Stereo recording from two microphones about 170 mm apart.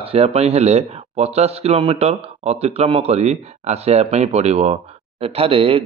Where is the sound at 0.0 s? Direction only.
35° right (ahead or behind).